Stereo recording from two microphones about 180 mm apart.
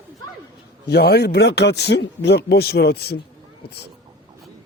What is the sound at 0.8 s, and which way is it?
Speech, 65° left (ahead or behind).